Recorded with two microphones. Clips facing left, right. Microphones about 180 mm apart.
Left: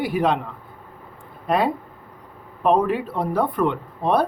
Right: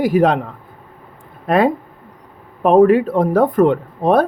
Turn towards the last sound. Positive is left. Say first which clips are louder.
# right 6 dB
turn(degrees=-50)  # may be behind; listen again after turning